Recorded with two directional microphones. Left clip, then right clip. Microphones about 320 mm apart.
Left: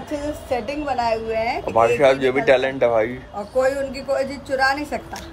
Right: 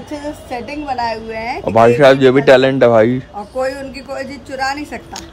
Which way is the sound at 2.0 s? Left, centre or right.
Right.